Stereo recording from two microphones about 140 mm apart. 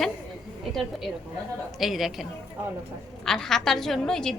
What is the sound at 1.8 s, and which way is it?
A woman's voice, centre (ahead or behind).